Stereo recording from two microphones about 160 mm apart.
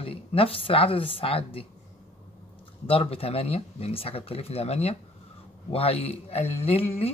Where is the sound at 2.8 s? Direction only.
35° left (ahead or behind).